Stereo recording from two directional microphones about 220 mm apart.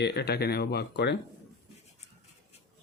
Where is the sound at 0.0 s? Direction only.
50° left (ahead or behind).